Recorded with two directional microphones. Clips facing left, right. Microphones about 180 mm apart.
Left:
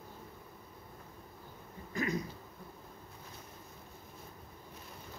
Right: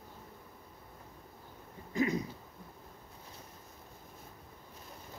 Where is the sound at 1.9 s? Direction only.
25° right (ahead or behind).